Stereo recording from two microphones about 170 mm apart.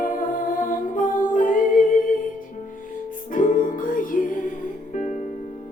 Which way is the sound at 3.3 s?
50° left (ahead or behind).